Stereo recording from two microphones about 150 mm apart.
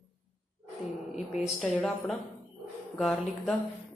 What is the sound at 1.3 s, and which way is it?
Speech, 5° right (ahead or behind).